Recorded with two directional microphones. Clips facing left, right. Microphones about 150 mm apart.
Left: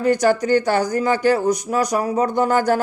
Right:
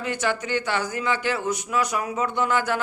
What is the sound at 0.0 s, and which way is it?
Speech, 40° left (ahead or behind).